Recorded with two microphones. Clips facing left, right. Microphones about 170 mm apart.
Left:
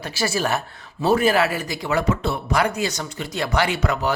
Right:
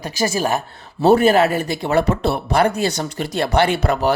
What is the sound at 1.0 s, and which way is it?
Speech, 60° right (ahead or behind).